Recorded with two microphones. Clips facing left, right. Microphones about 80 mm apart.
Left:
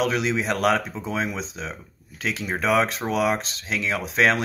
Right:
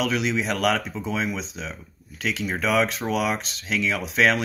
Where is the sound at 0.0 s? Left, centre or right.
Left.